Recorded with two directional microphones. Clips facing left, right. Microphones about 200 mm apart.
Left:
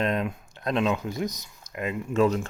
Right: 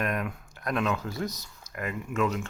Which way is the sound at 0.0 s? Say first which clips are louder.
Left 4 dB; 25° left (ahead or behind).